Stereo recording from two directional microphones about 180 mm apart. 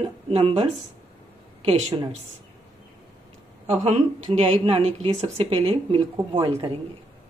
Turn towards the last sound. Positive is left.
turn(degrees=-25)  # may be behind; listen again after turning